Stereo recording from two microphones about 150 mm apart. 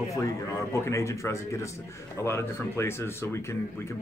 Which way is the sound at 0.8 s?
20° left (ahead or behind).